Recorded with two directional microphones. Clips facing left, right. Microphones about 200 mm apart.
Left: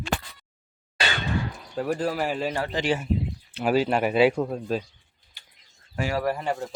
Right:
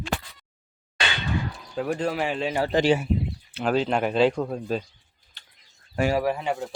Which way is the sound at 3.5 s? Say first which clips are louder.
Left 1 dB; 5° left (ahead or behind).